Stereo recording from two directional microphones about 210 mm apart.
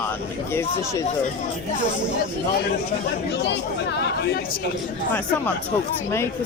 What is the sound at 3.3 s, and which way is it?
Speech, 55° left (ahead or behind).